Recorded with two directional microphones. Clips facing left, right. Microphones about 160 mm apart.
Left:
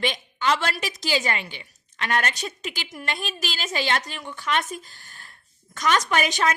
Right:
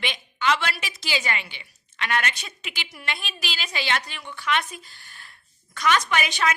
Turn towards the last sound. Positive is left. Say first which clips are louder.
# left 2 dB
turn(degrees=45)  # may be behind; listen again after turning